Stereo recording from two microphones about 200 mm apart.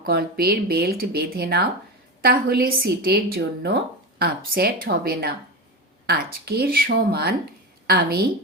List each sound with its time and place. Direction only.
0.0 s speech: 50° right (ahead or behind)